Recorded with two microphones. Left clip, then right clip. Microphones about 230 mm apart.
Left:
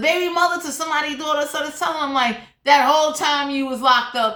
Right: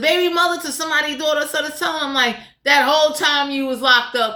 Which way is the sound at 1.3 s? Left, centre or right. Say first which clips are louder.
Right 1 dB; centre.